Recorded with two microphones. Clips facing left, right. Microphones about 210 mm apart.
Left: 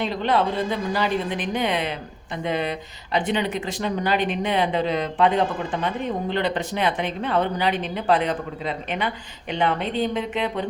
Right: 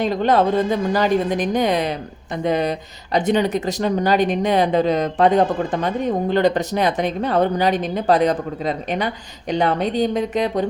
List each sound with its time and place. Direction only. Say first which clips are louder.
0.0 s a woman's voice: right 5 dB; 45° right (ahead or behind)